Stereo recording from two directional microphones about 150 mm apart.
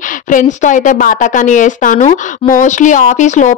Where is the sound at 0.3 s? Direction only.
55° left (ahead or behind).